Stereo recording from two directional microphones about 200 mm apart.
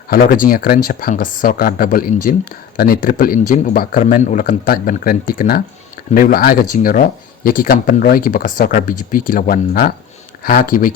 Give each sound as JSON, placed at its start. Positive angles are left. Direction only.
{"t": 0.1, "sound": "speech", "side_deg": 50}